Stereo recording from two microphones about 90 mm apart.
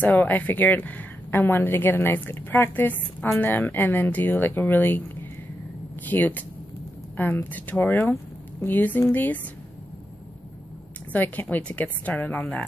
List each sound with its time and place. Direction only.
0.0 s a woman's voice: 20° left (ahead or behind)
11.1 s a woman's voice: 20° left (ahead or behind)